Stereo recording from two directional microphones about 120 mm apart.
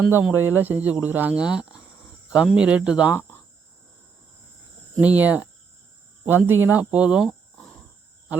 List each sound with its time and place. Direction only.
0.0 s speech: 10° right (ahead or behind)
4.9 s speech: 15° right (ahead or behind)